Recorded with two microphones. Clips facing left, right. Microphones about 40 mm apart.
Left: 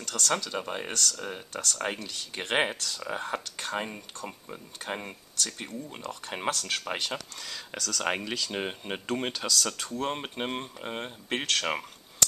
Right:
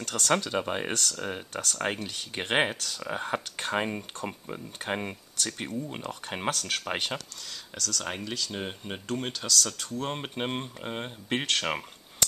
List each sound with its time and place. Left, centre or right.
0.0 s speech: right
7.7 s speech: centre
8.0 s speech: left
8.5 s speech: centre
9.9 s speech: centre